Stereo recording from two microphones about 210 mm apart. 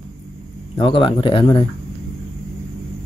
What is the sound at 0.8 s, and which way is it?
Speech, 25° left (ahead or behind).